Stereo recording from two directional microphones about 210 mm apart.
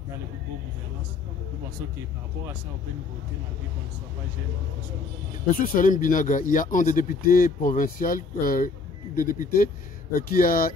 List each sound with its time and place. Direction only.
5.6 s speech: 40° left (ahead or behind)